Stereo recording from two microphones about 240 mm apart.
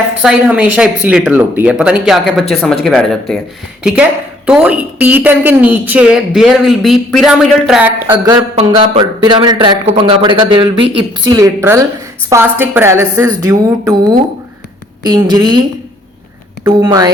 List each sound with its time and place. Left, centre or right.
0.2 s a woman's voice: centre
4.4 s a woman's voice: centre
8.1 s a man's voice: centre
16.6 s a woman's voice: centre